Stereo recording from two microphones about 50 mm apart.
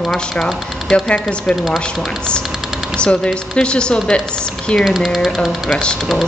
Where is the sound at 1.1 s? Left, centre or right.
Left.